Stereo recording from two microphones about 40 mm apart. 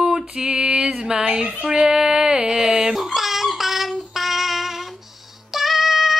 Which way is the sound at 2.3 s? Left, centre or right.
Centre.